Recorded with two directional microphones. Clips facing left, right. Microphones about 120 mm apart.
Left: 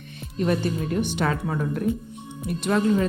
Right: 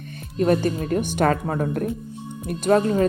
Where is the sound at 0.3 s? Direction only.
45° right (ahead or behind).